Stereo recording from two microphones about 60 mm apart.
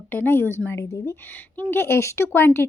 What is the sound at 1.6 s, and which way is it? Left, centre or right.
Speech, left.